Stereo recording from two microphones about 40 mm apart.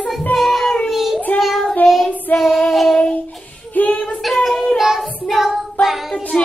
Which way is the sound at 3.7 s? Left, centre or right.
Left.